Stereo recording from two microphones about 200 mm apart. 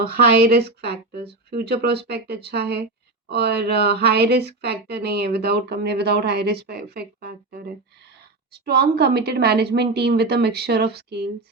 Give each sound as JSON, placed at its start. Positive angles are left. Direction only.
{"t": 0.0, "sound": "speech", "side_deg": -50}